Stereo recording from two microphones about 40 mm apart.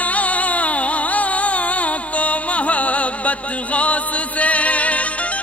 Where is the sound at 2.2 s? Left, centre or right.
Left.